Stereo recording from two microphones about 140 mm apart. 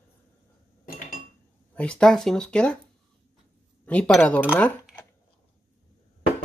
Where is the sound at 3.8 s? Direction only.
10° left (ahead or behind).